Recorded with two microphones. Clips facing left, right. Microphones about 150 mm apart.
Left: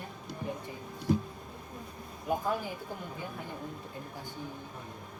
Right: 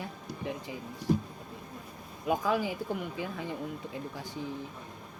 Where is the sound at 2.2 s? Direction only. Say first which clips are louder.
Right 3 dB; 90° right.